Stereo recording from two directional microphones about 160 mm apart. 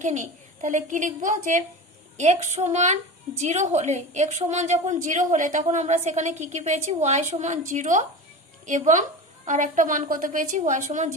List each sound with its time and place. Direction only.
0.0 s a woman's voice: 50° right (ahead or behind)